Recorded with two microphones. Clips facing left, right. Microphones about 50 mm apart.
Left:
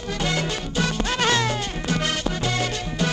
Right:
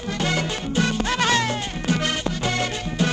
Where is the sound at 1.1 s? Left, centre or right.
Right.